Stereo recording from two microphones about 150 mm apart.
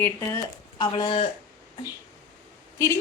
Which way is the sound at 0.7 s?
30° left (ahead or behind).